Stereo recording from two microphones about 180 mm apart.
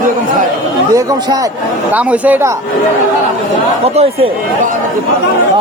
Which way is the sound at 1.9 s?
10° right (ahead or behind).